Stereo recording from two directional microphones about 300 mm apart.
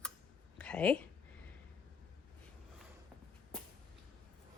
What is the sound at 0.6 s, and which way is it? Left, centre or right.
Speech, centre.